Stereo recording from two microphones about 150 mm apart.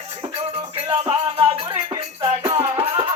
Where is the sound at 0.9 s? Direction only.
35° right (ahead or behind).